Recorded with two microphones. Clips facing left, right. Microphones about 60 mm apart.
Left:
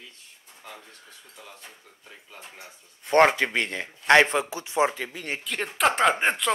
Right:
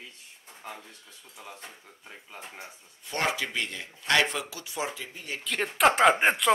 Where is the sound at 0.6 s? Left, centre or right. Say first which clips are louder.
Right 2 dB; right.